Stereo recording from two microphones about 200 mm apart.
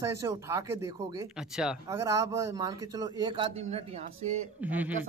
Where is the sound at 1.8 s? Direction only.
15° right (ahead or behind); by 4.4 s 30° right (ahead or behind).